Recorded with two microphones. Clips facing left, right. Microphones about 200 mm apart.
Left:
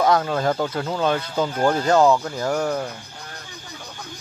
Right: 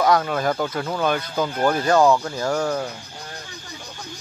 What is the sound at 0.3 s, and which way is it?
Speech, 25° left (ahead or behind).